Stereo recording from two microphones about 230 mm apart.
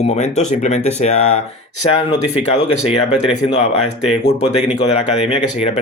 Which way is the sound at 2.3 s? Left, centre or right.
Left.